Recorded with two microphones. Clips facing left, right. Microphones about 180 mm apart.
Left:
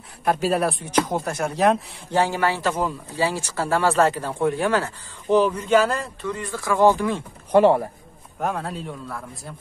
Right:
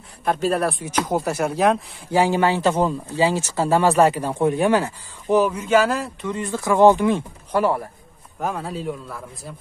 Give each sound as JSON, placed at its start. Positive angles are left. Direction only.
{"t": 0.2, "sound": "speech", "side_deg": 5}
{"t": 2.1, "sound": "speech", "side_deg": -15}
{"t": 6.2, "sound": "speech", "side_deg": -20}
{"t": 7.5, "sound": "speech", "side_deg": 25}
{"t": 8.4, "sound": "speech", "side_deg": 0}